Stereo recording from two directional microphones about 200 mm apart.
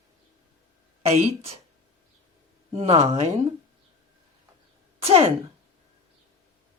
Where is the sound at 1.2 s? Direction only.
30° right (ahead or behind).